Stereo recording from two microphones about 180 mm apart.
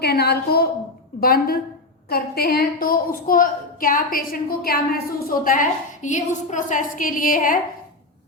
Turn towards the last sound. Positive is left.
turn(degrees=50)  # may be behind; listen again after turning